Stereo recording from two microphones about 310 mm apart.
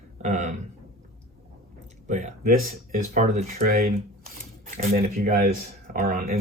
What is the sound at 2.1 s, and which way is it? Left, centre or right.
Speech, right.